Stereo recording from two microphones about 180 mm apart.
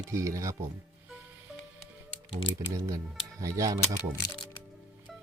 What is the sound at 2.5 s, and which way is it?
Speech, 20° right (ahead or behind).